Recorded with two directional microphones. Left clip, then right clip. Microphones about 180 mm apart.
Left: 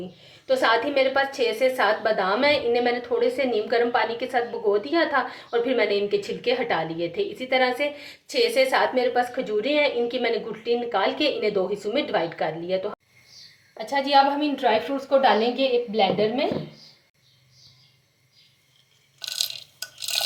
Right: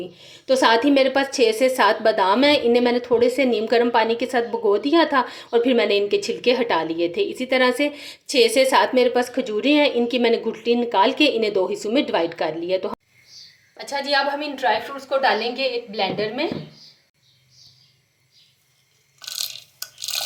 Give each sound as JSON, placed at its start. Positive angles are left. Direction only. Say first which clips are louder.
{"t": 0.2, "sound": "a woman's voice", "louder": "right 4 dB", "side_deg": -45}
{"t": 13.9, "sound": "a woman's voice", "louder": "left 2 dB", "side_deg": -60}
{"t": 19.2, "sound": "a sound", "louder": "left 1 dB", "side_deg": -10}